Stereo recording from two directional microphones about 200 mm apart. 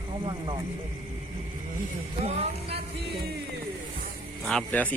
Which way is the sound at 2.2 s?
30° right (ahead or behind).